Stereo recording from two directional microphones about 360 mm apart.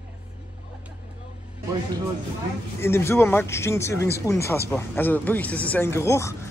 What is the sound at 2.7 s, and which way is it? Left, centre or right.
Speech, centre.